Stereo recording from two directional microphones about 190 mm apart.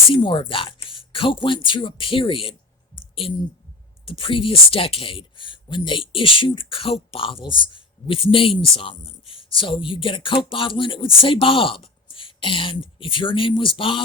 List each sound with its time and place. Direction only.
0.1 s speech: 25° left (ahead or behind)